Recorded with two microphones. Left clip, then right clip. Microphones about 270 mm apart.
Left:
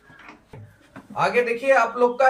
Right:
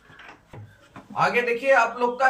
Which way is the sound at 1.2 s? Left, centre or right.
Centre.